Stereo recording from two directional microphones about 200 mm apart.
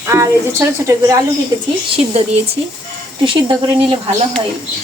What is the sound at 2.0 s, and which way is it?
Speech, 30° right (ahead or behind).